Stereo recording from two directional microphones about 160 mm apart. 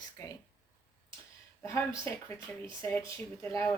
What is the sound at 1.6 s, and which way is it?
Speech, 15° left (ahead or behind).